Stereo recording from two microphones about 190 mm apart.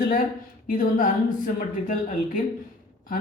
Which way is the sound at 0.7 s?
45° left (ahead or behind).